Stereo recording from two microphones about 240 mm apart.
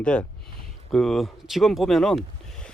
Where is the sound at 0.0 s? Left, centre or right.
Centre.